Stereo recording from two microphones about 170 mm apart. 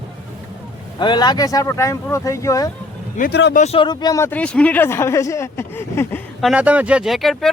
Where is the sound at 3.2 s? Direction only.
80° left.